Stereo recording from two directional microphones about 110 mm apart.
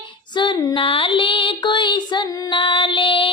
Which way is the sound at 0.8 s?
50° left (ahead or behind).